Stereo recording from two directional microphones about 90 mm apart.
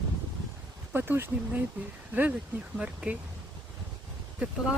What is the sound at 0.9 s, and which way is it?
Speech, 25° right (ahead or behind).